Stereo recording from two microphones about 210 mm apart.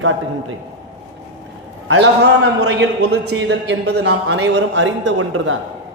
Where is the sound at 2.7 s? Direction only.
55° right (ahead or behind); by 5.6 s 80° right.